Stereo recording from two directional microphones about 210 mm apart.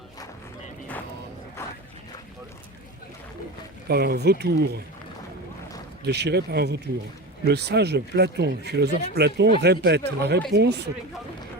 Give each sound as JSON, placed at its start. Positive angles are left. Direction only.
{"t": 3.8, "sound": "speech", "side_deg": -50}
{"t": 6.1, "sound": "speech", "side_deg": -50}